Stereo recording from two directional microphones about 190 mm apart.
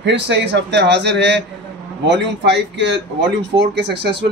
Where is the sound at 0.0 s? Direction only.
65° right (ahead or behind).